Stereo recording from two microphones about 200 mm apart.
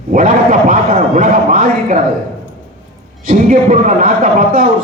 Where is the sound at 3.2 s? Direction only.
40° right (ahead or behind).